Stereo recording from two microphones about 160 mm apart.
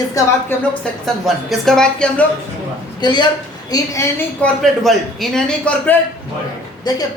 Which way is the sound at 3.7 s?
15° left (ahead or behind).